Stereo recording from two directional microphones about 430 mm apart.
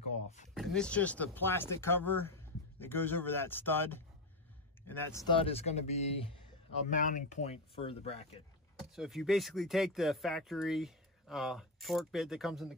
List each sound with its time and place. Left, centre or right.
0.6 s speech: centre
8.9 s speech: centre